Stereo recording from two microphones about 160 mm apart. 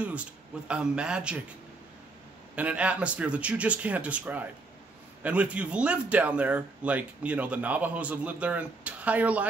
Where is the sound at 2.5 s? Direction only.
10° right (ahead or behind).